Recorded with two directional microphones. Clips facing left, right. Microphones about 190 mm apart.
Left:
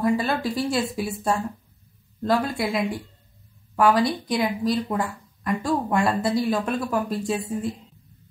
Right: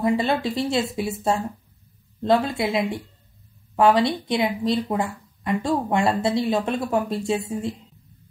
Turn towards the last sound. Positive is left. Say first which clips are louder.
# right 1 dB
turn(degrees=-25)  # may be behind; listen again after turning